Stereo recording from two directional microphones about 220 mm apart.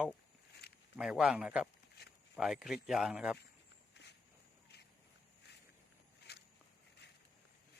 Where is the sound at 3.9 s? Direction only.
50° left (ahead or behind).